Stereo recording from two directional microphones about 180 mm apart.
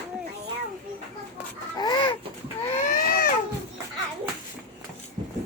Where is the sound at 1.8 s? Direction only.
25° left (ahead or behind).